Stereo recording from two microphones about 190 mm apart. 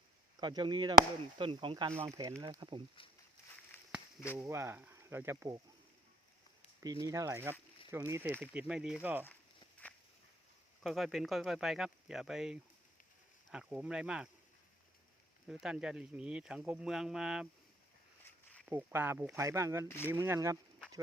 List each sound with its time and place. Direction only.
0.3 s speech: 20° right (ahead or behind)
4.4 s speech: 15° right (ahead or behind)
7.0 s speech: 15° right (ahead or behind)
10.8 s speech: centre (ahead or behind)
15.4 s speech: 5° right (ahead or behind)
18.8 s speech: 10° right (ahead or behind)